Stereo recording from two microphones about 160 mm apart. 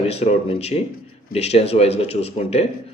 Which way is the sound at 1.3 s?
40° left (ahead or behind).